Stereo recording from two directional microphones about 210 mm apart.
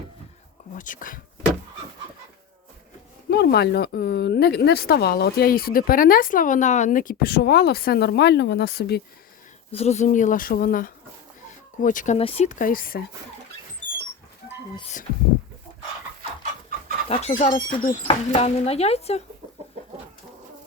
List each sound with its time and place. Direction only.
0.8 s speech: 40° left (ahead or behind)
3.2 s speech: 50° left (ahead or behind)
9.7 s speech: 30° left (ahead or behind)
17.1 s speech: 30° left (ahead or behind)